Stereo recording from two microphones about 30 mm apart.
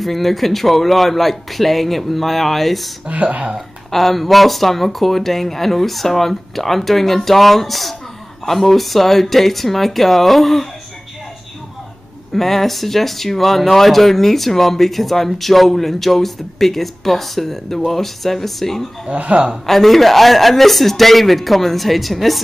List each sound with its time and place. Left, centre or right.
0.0 s speech: centre
3.1 s speech: right
3.9 s speech: centre
12.4 s speech: centre
19.0 s speech: right
19.6 s speech: centre